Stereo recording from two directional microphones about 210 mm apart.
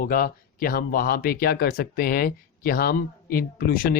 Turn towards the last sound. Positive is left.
turn(degrees=45)  # may be behind; listen again after turning